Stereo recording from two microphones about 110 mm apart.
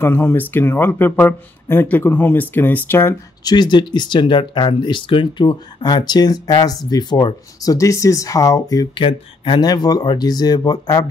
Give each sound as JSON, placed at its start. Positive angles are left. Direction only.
{"t": 0.0, "sound": "speech", "side_deg": 20}
{"t": 3.4, "sound": "speech", "side_deg": 40}
{"t": 8.9, "sound": "speech", "side_deg": 50}